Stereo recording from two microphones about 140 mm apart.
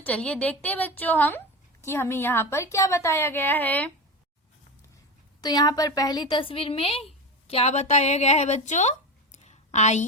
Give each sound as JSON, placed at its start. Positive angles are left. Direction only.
{"t": 0.0, "sound": "a woman's voice", "side_deg": 10}
{"t": 5.4, "sound": "a woman's voice", "side_deg": 30}